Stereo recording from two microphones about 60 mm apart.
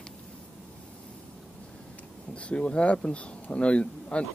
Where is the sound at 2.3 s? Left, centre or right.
Centre.